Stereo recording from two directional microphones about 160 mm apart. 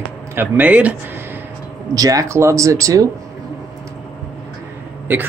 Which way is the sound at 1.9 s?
20° right (ahead or behind).